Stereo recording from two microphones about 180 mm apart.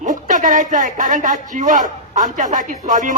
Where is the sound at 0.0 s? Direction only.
45° right (ahead or behind).